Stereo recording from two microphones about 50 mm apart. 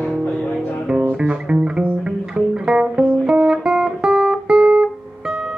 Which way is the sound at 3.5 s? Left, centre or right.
Centre.